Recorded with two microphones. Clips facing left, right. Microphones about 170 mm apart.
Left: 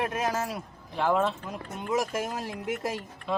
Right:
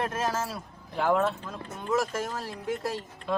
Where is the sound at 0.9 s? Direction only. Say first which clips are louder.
Even; centre (ahead or behind).